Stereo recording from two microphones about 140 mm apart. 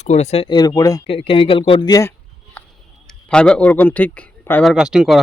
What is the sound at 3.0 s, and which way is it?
Speech, 5° left (ahead or behind).